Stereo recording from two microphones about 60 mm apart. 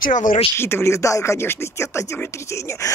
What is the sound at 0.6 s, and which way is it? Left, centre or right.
Speech, left.